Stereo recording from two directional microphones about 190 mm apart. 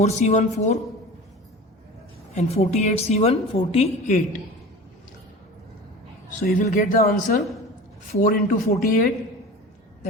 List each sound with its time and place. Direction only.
0.0 s a woman's voice: 35° left (ahead or behind)
2.3 s a woman's voice: 35° left (ahead or behind)
6.4 s speech: 50° left (ahead or behind)